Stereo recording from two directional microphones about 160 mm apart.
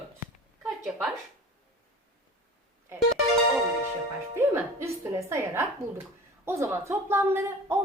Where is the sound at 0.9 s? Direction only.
5° right (ahead or behind).